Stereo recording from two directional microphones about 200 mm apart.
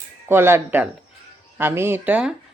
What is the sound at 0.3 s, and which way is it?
Speech, 10° right (ahead or behind).